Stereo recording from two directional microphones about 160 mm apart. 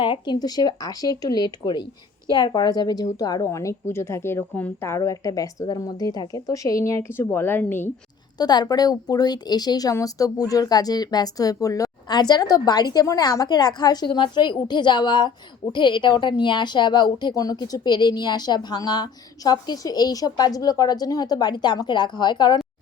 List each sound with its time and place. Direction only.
0.0 s a woman's voice: 30° left (ahead or behind); by 7.9 s 15° left (ahead or behind)
8.4 s speech: 25° left (ahead or behind)